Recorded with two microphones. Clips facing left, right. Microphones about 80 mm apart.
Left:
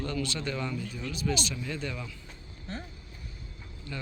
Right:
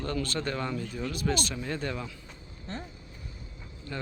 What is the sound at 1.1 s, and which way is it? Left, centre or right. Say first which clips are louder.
Speech: right 1 dB; right.